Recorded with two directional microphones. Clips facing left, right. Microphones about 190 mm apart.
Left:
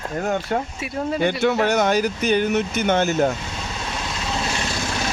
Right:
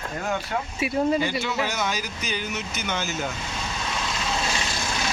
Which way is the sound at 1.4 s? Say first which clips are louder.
Left 9 dB; 60° left (ahead or behind).